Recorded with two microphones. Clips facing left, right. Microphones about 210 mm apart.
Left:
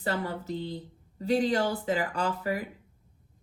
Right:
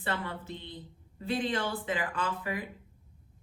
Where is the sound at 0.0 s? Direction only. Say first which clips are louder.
Left 4 dB; 40° left (ahead or behind).